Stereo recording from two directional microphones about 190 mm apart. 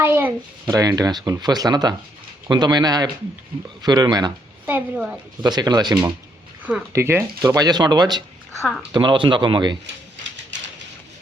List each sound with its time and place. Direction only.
0.0 s a woman's voice: 10° right (ahead or behind)
4.6 s a woman's voice: 10° right (ahead or behind)
5.4 s speech: 20° right (ahead or behind)